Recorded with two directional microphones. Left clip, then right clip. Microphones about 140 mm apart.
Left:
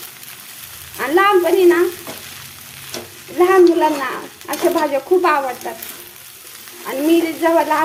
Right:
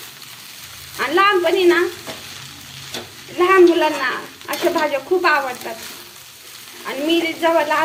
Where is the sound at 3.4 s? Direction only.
25° left (ahead or behind).